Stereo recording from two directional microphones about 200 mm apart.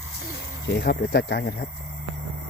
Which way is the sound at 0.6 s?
55° left (ahead or behind).